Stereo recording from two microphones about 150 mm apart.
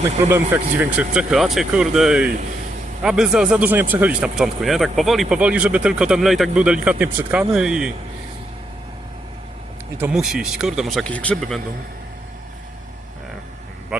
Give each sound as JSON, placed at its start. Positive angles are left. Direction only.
{"t": 0.3, "sound": "speech", "side_deg": -15}
{"t": 0.9, "sound": "speech", "side_deg": -5}
{"t": 10.0, "sound": "speech", "side_deg": -5}